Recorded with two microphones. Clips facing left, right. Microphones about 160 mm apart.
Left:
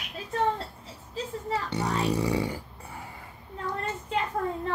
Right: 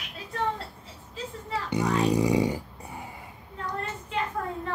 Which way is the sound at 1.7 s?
15° right (ahead or behind).